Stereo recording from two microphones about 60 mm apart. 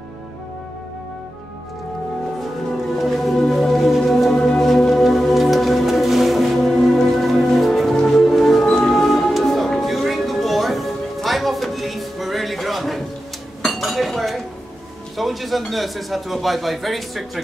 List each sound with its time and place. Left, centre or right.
3.0 s music: centre
13.7 s dishes: centre
15.1 s a sound: centre